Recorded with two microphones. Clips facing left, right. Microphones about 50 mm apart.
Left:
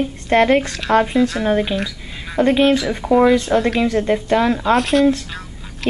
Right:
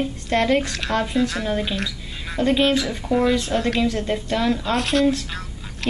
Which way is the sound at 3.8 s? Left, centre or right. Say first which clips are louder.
Left 5 dB; left.